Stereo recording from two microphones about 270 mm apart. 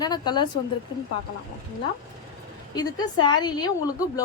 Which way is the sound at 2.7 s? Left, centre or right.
Centre.